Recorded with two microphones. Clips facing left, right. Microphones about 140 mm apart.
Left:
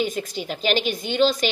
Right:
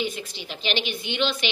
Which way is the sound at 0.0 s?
45° left (ahead or behind).